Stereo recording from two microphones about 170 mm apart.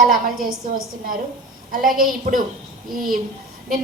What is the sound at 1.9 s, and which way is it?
Speech, 55° right (ahead or behind).